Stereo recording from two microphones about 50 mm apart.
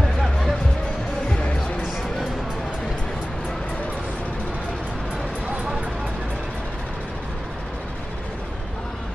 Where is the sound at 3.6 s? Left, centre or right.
Left.